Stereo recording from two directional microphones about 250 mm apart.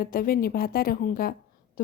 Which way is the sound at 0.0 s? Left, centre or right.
Left.